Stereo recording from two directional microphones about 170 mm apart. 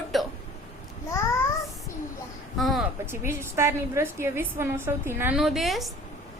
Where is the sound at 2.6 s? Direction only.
Centre (ahead or behind).